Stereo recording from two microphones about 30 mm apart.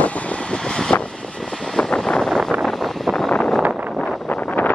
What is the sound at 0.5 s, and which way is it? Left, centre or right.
Vehicle, left.